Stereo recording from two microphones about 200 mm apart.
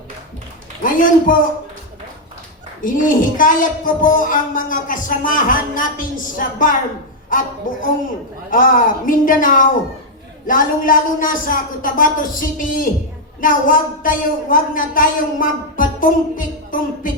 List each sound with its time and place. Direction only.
0.8 s a man's voice: 40° left (ahead or behind)
2.8 s speech: 40° left (ahead or behind)